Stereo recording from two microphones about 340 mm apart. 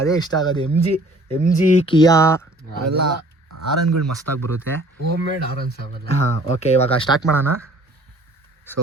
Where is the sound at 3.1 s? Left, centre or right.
Right.